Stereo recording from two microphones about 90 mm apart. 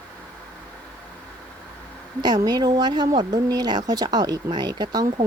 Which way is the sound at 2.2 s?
50° right (ahead or behind).